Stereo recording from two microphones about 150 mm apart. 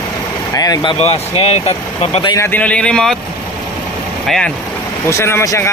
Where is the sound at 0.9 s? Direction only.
45° left (ahead or behind).